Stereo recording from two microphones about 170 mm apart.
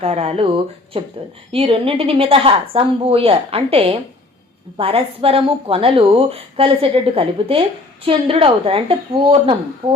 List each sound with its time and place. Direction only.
0.0 s a woman's voice: 35° right (ahead or behind)